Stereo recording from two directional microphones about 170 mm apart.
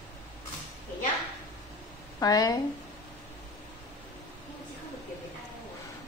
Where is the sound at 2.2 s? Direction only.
20° left (ahead or behind).